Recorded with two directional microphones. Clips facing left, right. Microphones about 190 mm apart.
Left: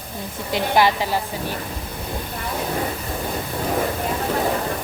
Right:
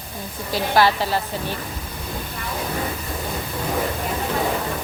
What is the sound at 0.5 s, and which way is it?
Speech, 15° left (ahead or behind).